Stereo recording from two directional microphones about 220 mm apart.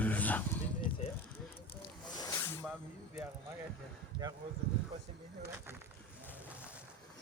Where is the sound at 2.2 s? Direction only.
10° left (ahead or behind).